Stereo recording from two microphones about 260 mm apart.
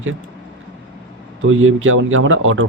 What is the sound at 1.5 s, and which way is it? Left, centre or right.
Speech, right.